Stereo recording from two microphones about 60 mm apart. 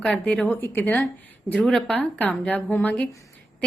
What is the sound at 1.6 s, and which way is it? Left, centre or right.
Speech, centre.